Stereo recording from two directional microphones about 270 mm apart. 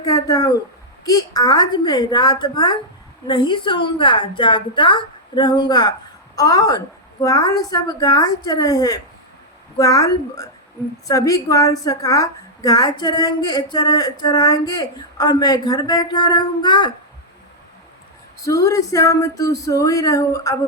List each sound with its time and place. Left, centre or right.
0.0 s a woman's voice: centre
18.3 s a woman's voice: centre